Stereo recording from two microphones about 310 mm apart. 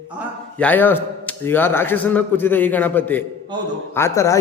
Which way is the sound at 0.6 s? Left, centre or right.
Centre.